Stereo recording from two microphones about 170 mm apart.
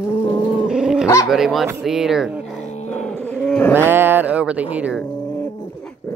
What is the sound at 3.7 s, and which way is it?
Speech, 10° right (ahead or behind).